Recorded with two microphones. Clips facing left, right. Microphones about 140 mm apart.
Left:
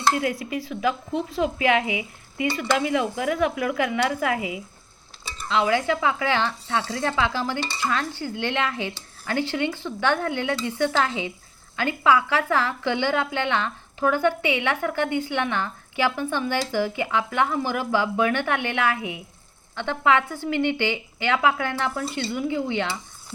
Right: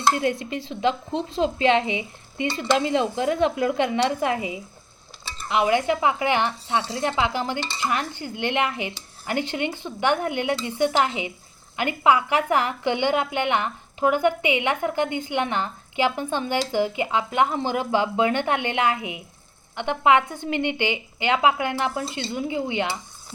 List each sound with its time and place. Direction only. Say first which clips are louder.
0.2 s a woman's voice: right 1 dB; 25° right (ahead or behind)